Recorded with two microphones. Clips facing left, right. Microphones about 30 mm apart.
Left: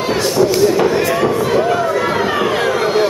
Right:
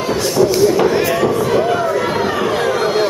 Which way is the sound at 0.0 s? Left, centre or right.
Centre.